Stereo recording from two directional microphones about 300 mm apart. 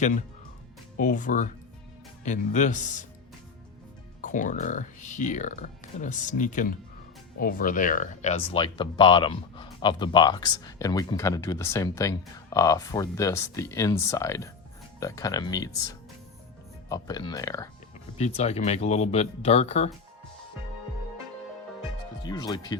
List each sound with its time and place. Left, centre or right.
0.9 s speech: left
4.2 s speech: left
21.8 s music: centre